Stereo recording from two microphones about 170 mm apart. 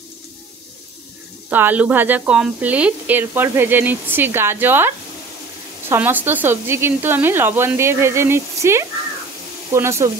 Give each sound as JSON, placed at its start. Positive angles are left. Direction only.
{"t": 1.5, "sound": "speech", "side_deg": -10}